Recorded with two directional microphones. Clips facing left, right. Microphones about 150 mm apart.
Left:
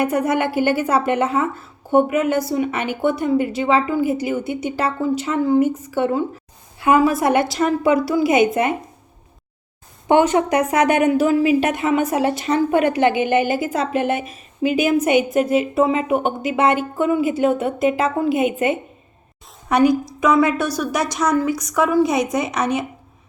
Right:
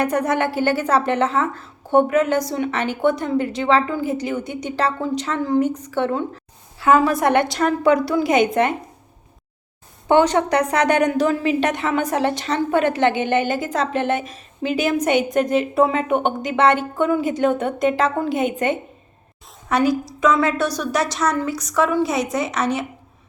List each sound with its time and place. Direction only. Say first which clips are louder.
0.0 s a woman's voice: left 1 dB; 10° left (ahead or behind)
10.1 s a woman's voice: left 1 dB; 10° left (ahead or behind)